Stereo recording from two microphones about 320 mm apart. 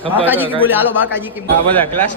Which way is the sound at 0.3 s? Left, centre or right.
Centre.